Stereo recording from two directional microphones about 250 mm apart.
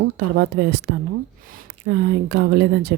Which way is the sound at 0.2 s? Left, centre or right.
Right.